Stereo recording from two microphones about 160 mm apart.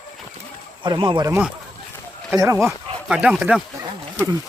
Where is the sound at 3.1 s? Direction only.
5° right (ahead or behind).